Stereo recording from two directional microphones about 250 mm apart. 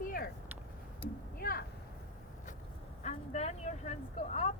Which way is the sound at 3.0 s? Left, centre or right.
Left.